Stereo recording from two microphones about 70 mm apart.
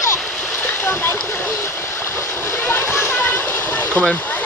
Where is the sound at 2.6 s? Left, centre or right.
Left.